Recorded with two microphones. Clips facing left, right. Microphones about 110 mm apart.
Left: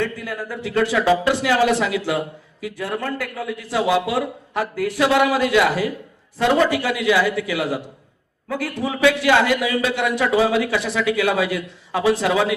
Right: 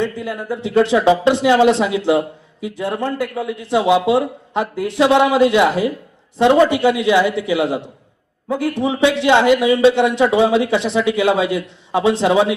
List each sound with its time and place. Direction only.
0.0 s speech: 20° right (ahead or behind)